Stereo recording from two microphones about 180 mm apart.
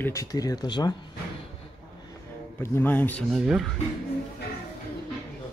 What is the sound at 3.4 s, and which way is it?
Speech, centre (ahead or behind).